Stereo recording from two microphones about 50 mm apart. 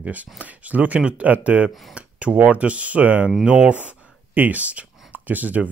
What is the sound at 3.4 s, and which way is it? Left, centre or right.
Speech, centre.